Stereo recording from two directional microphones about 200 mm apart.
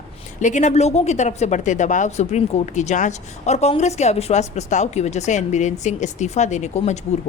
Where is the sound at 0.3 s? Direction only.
35° left (ahead or behind).